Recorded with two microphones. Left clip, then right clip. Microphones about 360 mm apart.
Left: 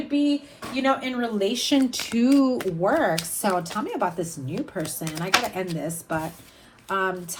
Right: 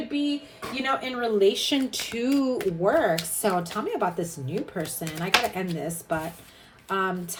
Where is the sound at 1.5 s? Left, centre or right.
Left.